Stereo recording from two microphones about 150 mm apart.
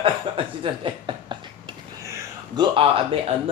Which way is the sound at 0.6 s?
35° right (ahead or behind).